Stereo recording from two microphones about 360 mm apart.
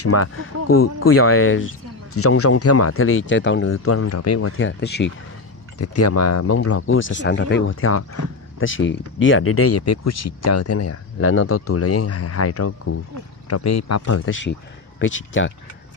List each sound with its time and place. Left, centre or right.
0.0 s speech: left
5.8 s speech: left